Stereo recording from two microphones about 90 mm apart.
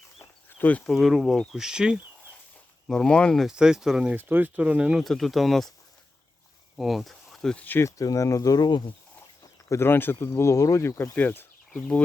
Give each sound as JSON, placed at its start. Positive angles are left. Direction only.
{"t": 0.2, "sound": "a sound", "side_deg": 20}
{"t": 0.9, "sound": "speech", "side_deg": 0}
{"t": 2.8, "sound": "speech", "side_deg": 5}
{"t": 3.4, "sound": "speech", "side_deg": -5}
{"t": 4.1, "sound": "speech", "side_deg": -20}
{"t": 5.0, "sound": "speech", "side_deg": 0}
{"t": 6.7, "sound": "speech", "side_deg": 0}
{"t": 7.6, "sound": "speech", "side_deg": 20}
{"t": 7.9, "sound": "speech", "side_deg": 40}
{"t": 9.4, "sound": "speech", "side_deg": 35}
{"t": 11.7, "sound": "speech", "side_deg": 10}